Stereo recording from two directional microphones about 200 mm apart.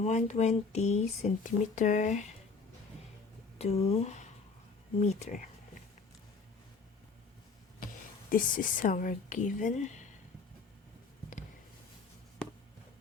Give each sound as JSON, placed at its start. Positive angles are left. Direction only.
{"t": 0.0, "sound": "speech", "side_deg": 35}
{"t": 3.6, "sound": "speech", "side_deg": 30}
{"t": 8.3, "sound": "speech", "side_deg": 45}